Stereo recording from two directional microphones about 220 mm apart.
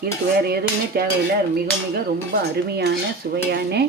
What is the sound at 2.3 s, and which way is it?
Cutlery, 45° right (ahead or behind).